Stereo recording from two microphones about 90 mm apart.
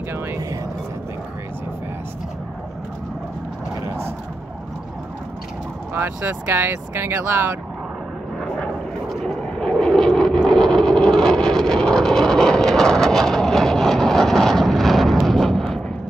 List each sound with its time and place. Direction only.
3.8 s vehicle: 30° right (ahead or behind)
5.9 s speech: 20° right (ahead or behind)
8.4 s vehicle: 5° left (ahead or behind)